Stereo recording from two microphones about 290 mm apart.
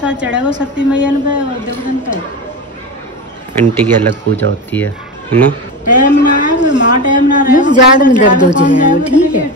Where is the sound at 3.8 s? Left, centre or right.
Centre.